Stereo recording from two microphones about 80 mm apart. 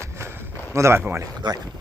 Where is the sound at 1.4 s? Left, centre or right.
Right.